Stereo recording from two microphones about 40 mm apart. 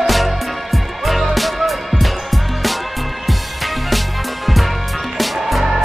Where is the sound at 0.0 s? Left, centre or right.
Centre.